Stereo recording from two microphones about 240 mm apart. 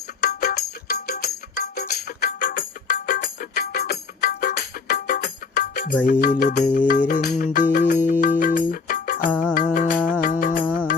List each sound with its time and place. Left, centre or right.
0.2 s music: left
9.3 s music: centre
9.7 s music: left